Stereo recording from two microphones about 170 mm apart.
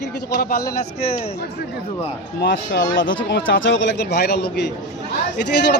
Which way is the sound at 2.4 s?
80° left.